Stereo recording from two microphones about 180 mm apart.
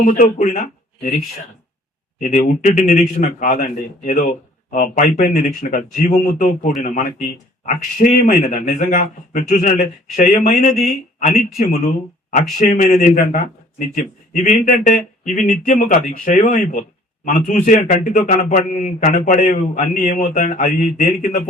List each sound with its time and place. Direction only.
0.0 s speech: 50° left (ahead or behind)
2.1 s a man's voice: 45° left (ahead or behind)